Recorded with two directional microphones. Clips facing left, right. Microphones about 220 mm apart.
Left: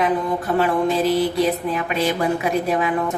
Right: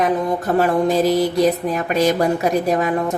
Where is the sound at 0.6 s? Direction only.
40° right (ahead or behind).